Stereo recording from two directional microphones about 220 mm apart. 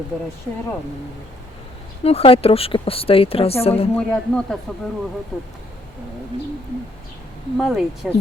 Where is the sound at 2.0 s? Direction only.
25° left (ahead or behind).